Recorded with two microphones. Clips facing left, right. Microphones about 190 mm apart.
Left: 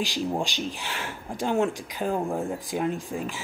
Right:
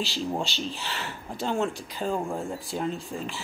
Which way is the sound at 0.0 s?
15° left (ahead or behind).